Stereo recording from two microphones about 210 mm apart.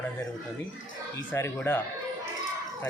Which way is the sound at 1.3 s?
10° left (ahead or behind).